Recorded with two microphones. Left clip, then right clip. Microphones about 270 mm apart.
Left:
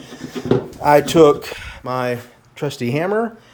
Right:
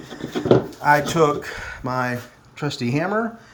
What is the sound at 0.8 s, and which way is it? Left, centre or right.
Speech, left.